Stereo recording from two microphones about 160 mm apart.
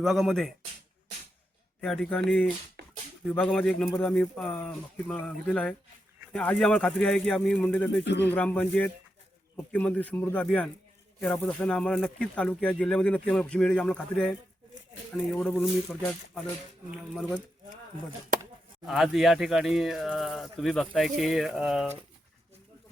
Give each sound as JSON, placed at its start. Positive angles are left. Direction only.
{"t": 0.0, "sound": "speech", "side_deg": 0}
{"t": 1.8, "sound": "speech", "side_deg": 5}
{"t": 2.8, "sound": "a sound", "side_deg": -90}
{"t": 3.2, "sound": "speech", "side_deg": 10}
{"t": 8.0, "sound": "speech", "side_deg": 90}
{"t": 8.3, "sound": "speech", "side_deg": 10}
{"t": 18.9, "sound": "speech", "side_deg": 0}